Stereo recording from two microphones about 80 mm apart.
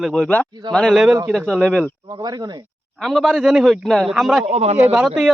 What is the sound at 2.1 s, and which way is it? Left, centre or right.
Speech, right.